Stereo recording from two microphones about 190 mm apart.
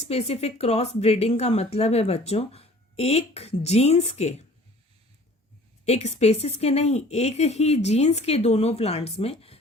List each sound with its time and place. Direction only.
0.1 s speech: 35° left (ahead or behind)
5.8 s speech: 35° left (ahead or behind)